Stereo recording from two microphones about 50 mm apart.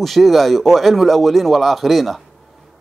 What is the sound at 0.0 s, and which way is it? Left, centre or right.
A man's voice, centre.